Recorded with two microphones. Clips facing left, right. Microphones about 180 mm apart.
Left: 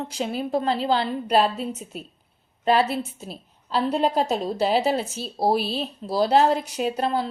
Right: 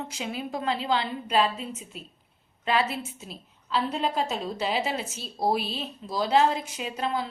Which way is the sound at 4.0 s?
40° left (ahead or behind).